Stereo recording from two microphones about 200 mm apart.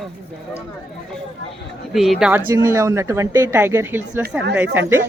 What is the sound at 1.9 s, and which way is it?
Speech, centre (ahead or behind).